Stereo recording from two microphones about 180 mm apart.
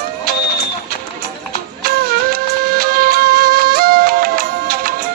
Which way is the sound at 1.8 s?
55° right (ahead or behind).